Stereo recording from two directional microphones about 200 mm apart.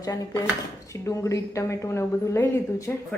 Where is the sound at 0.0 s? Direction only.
15° left (ahead or behind).